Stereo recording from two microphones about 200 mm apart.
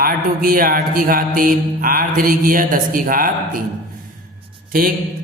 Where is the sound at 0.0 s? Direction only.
45° right (ahead or behind).